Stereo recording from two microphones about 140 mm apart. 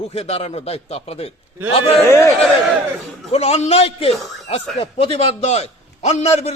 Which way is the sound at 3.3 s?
45° left (ahead or behind).